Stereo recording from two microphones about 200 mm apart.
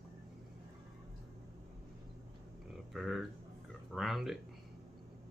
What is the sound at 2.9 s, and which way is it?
Speech, centre (ahead or behind).